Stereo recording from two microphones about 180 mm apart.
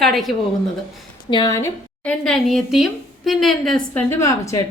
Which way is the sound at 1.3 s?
25° left (ahead or behind).